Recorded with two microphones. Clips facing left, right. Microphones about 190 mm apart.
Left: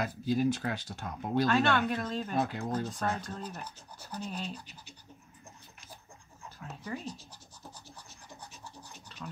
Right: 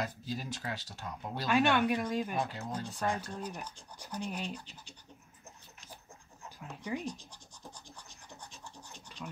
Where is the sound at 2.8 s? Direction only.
10° right (ahead or behind).